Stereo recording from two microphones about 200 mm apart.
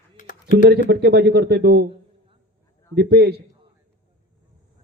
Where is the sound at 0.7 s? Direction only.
55° right (ahead or behind).